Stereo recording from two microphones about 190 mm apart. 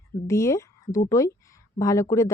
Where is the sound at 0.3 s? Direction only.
15° left (ahead or behind).